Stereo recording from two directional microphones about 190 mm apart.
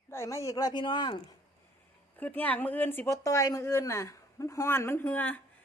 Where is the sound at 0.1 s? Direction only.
15° left (ahead or behind).